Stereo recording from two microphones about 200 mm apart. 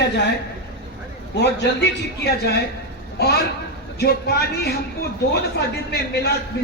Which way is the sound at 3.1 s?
55° left (ahead or behind).